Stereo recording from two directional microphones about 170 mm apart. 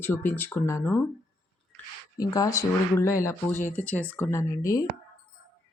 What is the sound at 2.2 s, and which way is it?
Speech, 20° left (ahead or behind).